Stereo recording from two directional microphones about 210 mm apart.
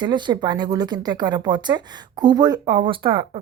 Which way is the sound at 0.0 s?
20° right (ahead or behind).